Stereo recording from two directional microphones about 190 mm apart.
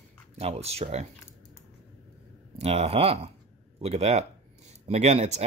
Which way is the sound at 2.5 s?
30° right (ahead or behind).